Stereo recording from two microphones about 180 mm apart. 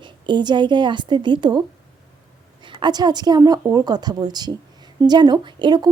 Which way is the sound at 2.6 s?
25° right (ahead or behind).